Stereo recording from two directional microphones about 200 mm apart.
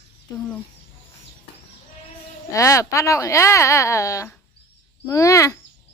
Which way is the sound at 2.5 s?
15° left (ahead or behind).